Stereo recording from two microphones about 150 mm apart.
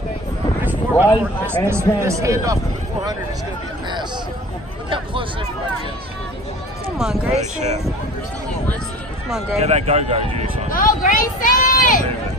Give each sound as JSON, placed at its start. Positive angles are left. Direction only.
{"t": 0.7, "sound": "a sound", "side_deg": -10}
{"t": 1.7, "sound": "a man's voice", "side_deg": -20}
{"t": 4.8, "sound": "a sound", "side_deg": -35}
{"t": 7.0, "sound": "speech", "side_deg": -5}
{"t": 9.6, "sound": "speech", "side_deg": -45}
{"t": 10.7, "sound": "speech", "side_deg": 65}